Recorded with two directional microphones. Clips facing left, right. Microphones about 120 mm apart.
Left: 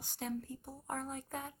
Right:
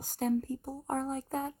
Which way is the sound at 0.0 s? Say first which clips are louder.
Right 10 dB; 40° right (ahead or behind).